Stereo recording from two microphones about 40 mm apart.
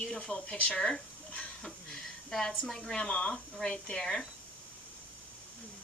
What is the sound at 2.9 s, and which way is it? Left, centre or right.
A woman's voice, left.